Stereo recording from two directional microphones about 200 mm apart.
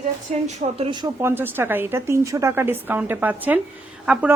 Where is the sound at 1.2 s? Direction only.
10° right (ahead or behind).